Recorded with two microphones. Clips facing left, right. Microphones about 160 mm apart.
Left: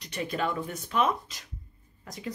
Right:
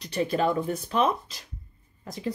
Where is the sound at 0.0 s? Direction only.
35° right (ahead or behind).